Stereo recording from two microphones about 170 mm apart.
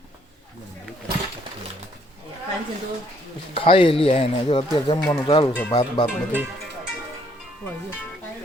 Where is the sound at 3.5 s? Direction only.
30° left (ahead or behind).